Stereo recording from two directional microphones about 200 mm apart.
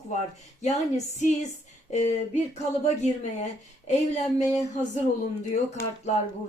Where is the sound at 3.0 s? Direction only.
35° left (ahead or behind).